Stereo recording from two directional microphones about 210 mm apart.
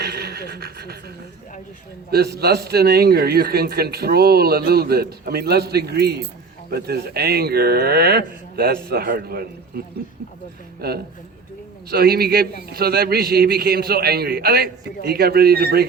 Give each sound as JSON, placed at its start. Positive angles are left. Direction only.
{"t": 0.0, "sound": "speech", "side_deg": -50}
{"t": 2.0, "sound": "a man's voice", "side_deg": -50}